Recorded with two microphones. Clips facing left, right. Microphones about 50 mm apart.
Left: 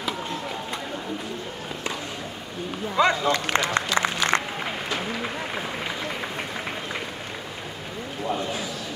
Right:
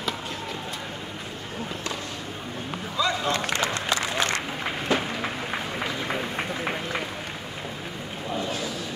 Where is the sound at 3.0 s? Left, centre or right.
Left.